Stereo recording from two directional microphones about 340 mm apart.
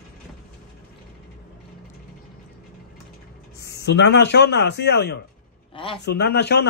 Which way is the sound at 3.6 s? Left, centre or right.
Left.